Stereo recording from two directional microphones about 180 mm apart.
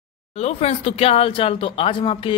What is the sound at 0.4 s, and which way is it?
Speech, 35° left (ahead or behind).